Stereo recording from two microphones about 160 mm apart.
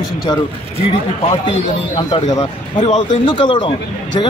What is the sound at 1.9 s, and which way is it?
Speech, 35° left (ahead or behind).